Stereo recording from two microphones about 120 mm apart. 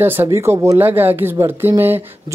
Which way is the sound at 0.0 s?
20° right (ahead or behind).